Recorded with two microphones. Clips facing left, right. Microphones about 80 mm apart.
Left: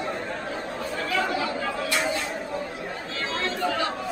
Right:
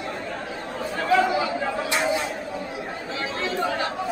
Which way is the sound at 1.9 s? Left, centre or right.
Centre.